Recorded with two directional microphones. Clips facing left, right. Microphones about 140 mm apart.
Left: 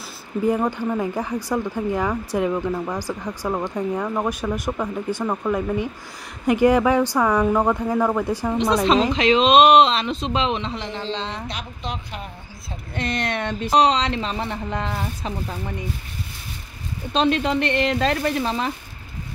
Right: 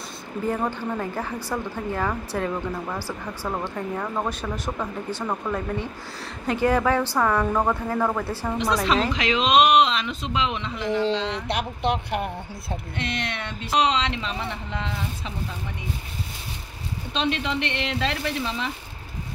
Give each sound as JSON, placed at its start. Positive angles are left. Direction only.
{"t": 0.5, "sound": "speech", "side_deg": 15}
{"t": 11.3, "sound": "speech", "side_deg": -65}
{"t": 12.9, "sound": "speech", "side_deg": 45}
{"t": 17.1, "sound": "speech", "side_deg": 40}